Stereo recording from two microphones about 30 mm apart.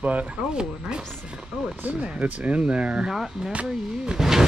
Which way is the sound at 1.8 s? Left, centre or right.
Right.